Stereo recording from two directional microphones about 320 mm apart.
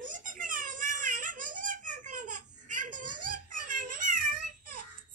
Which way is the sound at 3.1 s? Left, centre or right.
Right.